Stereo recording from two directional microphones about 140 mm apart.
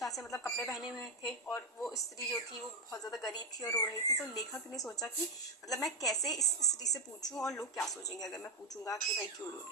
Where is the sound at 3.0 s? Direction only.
25° left (ahead or behind).